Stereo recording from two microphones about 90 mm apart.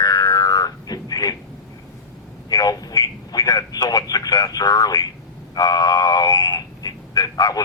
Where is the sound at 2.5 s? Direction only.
45° left (ahead or behind).